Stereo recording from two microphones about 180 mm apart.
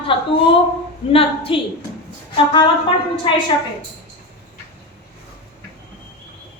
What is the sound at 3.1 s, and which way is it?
Speech, 30° left (ahead or behind).